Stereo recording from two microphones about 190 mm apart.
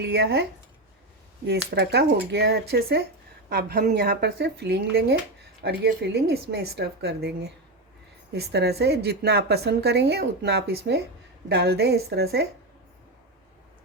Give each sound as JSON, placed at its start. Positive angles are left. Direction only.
{"t": 0.0, "sound": "a woman's voice", "side_deg": -60}
{"t": 1.5, "sound": "a woman's voice", "side_deg": -60}